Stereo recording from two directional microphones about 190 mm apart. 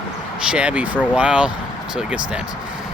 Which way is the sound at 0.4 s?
5° right (ahead or behind).